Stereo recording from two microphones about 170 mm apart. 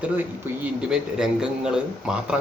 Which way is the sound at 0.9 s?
5° right (ahead or behind).